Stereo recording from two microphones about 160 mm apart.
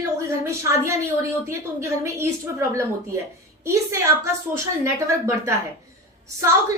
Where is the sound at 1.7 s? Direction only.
15° right (ahead or behind).